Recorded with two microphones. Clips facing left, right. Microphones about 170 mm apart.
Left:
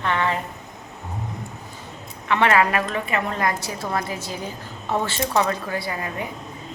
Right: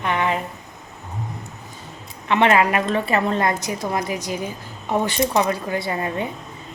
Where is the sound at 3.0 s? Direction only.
30° right (ahead or behind).